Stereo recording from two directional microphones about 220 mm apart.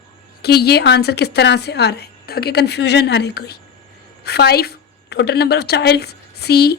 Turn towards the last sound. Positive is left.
turn(degrees=45)  # may be behind; listen again after turning